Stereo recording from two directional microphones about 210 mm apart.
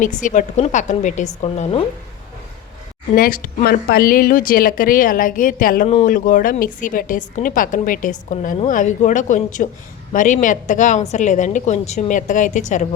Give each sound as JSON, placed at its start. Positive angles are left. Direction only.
{"t": 0.0, "sound": "a woman's voice", "side_deg": 40}
{"t": 3.1, "sound": "speech", "side_deg": 40}